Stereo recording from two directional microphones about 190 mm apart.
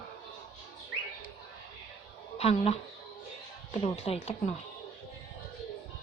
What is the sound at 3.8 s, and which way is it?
Speech, 35° left (ahead or behind).